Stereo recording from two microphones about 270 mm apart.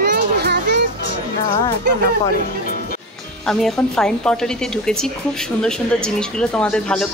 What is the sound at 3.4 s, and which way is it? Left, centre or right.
Speech, centre.